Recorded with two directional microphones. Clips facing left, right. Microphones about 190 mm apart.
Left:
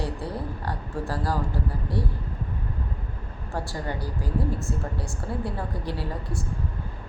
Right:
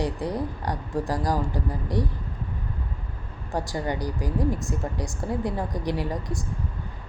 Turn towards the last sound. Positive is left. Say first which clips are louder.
# right 3 dB
turn(degrees=-15)  # may be behind; listen again after turning